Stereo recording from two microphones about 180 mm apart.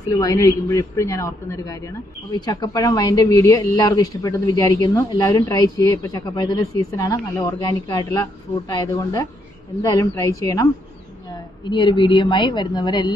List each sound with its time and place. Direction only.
0.1 s a man's voice: 20° left (ahead or behind)